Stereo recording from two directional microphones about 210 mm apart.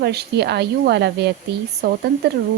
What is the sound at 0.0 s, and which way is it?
Speech, 50° right (ahead or behind).